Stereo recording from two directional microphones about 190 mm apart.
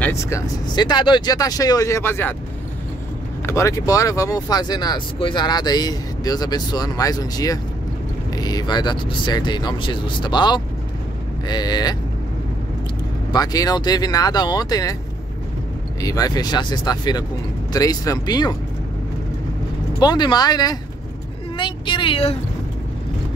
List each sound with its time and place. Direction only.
0.0 s speech: 15° left (ahead or behind)
3.4 s speech: 15° left (ahead or behind)
13.3 s speech: 20° left (ahead or behind)
16.0 s speech: 20° left (ahead or behind)
20.0 s speech: 20° left (ahead or behind)